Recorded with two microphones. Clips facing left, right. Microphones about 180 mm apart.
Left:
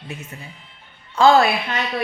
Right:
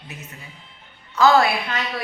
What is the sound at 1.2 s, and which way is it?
Speech, 25° left (ahead or behind).